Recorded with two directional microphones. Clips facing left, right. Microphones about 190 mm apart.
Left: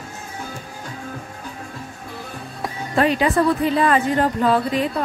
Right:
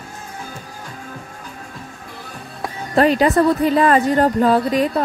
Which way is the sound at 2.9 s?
40° right (ahead or behind).